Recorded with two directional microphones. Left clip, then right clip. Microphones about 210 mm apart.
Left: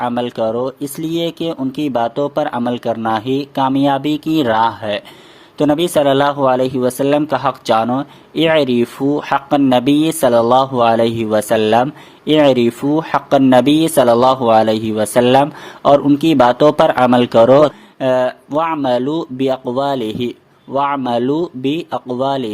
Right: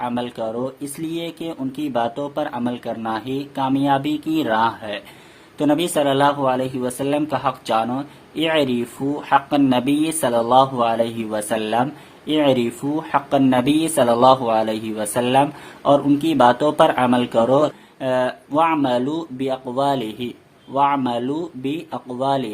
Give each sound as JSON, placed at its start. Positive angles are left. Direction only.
{"t": 0.0, "sound": "a man's voice", "side_deg": 30}